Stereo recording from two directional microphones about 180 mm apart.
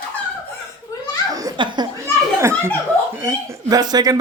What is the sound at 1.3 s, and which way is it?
Laughter, 25° right (ahead or behind).